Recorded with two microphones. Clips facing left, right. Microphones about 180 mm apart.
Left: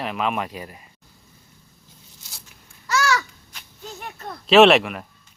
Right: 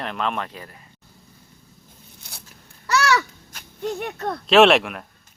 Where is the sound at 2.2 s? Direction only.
60° right (ahead or behind).